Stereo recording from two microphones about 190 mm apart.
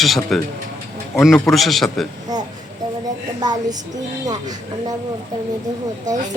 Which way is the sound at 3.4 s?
20° right (ahead or behind).